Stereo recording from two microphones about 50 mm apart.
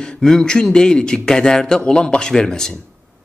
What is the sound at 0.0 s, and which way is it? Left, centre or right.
A man's voice, centre.